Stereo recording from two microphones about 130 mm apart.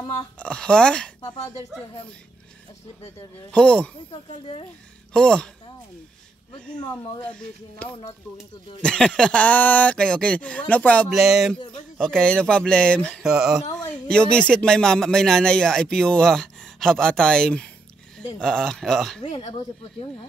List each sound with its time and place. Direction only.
0.4 s speech: 5° left (ahead or behind)
3.5 s speech: 10° left (ahead or behind)
5.1 s speech: 5° left (ahead or behind)
6.9 s speech: 10° left (ahead or behind)
11.1 s speech: centre (ahead or behind)
13.3 s speech: 5° right (ahead or behind)
13.7 s speech: 5° left (ahead or behind)
19.2 s speech: 45° left (ahead or behind)